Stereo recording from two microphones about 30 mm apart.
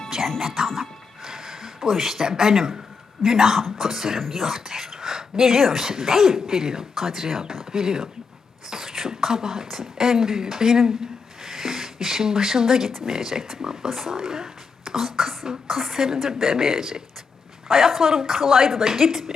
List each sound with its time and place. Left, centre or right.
0.4 s speech: centre
1.2 s a sound: centre
2.3 s speech: centre